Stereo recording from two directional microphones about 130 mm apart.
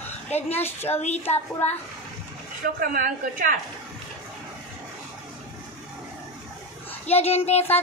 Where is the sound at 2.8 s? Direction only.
90° right.